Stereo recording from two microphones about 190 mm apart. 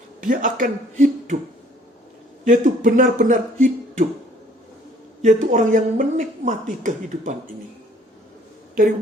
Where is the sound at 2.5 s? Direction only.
45° right (ahead or behind).